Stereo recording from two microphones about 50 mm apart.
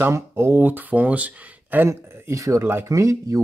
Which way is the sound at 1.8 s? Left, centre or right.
Right.